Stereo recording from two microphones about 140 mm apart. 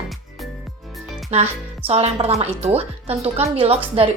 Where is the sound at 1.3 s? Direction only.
50° right (ahead or behind).